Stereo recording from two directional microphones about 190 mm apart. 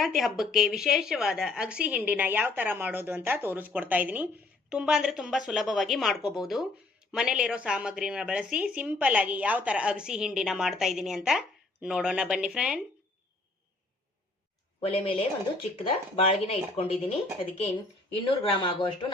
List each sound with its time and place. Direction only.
0.0 s a woman's voice: centre (ahead or behind)
14.8 s speech: 25° left (ahead or behind)